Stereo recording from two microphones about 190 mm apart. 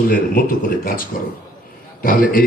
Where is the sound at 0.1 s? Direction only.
50° left (ahead or behind).